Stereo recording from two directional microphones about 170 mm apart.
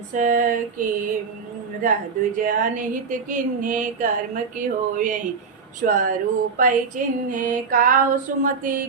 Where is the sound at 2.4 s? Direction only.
50° right (ahead or behind).